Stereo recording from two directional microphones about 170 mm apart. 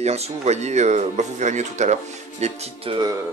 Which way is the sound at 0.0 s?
40° right (ahead or behind).